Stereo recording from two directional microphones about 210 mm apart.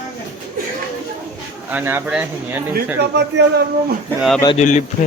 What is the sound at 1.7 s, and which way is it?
Speech, 10° right (ahead or behind).